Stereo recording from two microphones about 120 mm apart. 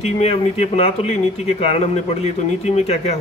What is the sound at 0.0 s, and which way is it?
Speech, 60° left (ahead or behind).